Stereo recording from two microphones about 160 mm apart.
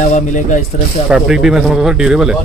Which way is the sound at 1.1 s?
5° right (ahead or behind).